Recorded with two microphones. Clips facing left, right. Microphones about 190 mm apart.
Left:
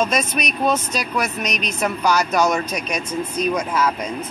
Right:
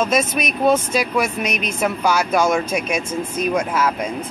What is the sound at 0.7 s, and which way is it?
Speech, 10° right (ahead or behind).